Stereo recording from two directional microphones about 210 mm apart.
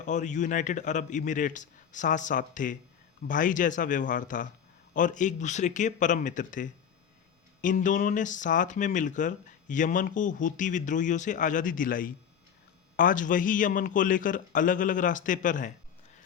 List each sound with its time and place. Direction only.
0.0 s speech: 35° left (ahead or behind)